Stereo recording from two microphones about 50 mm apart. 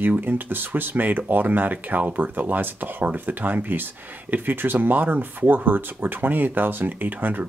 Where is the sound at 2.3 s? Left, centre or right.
Right.